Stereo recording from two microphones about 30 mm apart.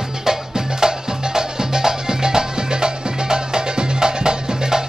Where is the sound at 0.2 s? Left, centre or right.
Centre.